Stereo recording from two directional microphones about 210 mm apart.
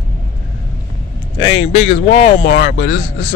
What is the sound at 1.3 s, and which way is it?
Speech, 25° left (ahead or behind).